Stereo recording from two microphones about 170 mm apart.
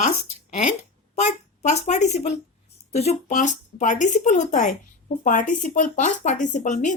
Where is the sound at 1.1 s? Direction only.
40° left (ahead or behind).